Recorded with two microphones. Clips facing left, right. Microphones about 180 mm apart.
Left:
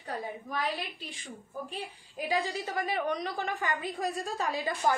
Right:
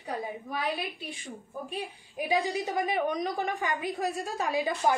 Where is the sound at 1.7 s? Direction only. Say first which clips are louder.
Right 4 dB; 15° right (ahead or behind).